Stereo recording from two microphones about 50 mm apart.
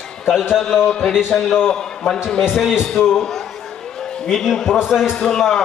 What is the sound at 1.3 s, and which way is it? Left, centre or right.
Speech, centre.